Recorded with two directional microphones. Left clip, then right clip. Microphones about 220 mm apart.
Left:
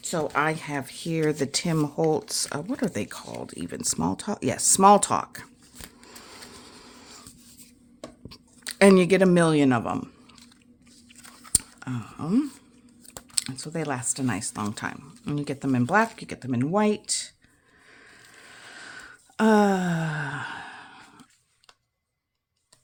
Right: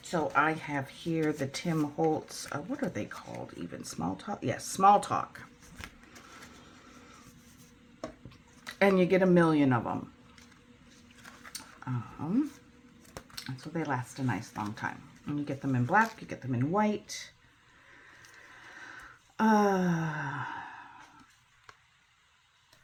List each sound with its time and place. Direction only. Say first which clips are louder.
0.0 s speech: left 3 dB; 55° left (ahead or behind)
8.3 s speech: left 7 dB; 50° left (ahead or behind)
11.5 s a sound: left 11 dB; 45° left (ahead or behind)
13.3 s speech: left 7 dB; 45° left (ahead or behind)
18.5 s gasp: left 5 dB; 45° left (ahead or behind)